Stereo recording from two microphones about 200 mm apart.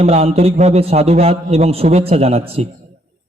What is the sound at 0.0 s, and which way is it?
Speech, 30° right (ahead or behind).